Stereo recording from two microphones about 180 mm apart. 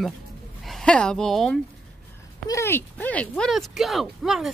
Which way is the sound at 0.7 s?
5° left (ahead or behind).